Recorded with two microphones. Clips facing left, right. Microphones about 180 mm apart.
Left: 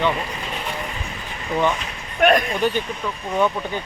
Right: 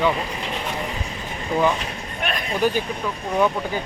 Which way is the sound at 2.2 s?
60° left (ahead or behind).